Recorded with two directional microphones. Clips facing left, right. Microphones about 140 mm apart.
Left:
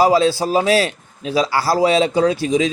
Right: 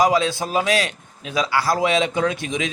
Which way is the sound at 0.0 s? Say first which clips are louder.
Left 4 dB; 35° left (ahead or behind).